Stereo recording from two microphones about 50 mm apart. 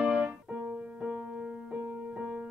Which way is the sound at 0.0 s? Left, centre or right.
Right.